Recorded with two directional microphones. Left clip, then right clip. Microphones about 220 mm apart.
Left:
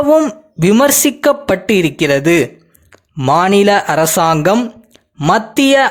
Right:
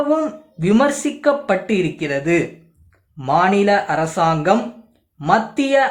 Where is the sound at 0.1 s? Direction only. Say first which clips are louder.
Left 8 dB; 40° left (ahead or behind).